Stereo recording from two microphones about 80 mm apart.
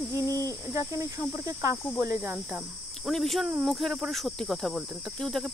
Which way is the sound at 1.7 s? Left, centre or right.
Left.